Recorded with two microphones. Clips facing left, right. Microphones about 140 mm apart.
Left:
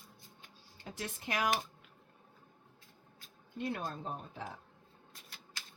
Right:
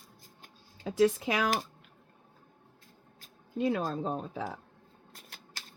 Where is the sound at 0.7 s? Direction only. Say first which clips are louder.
Right 18 dB; 90° right.